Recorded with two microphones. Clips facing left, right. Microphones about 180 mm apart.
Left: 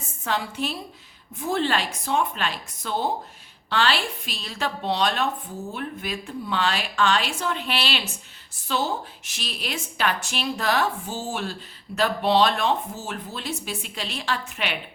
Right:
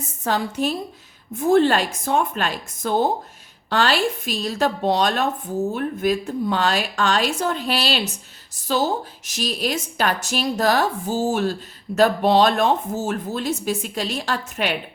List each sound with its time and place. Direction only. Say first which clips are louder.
0.3 s a woman's voice: right 5 dB; 40° right (ahead or behind)